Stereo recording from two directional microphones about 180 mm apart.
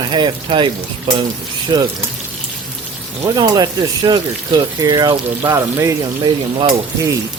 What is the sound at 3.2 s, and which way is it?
Speech, 25° right (ahead or behind).